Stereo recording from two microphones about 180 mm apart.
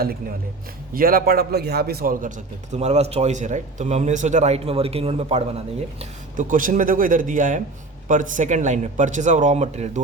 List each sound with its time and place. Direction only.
0.0 s a man's voice: 55° right (ahead or behind)
2.7 s a man's voice: 40° right (ahead or behind)
6.0 s speech: 45° right (ahead or behind)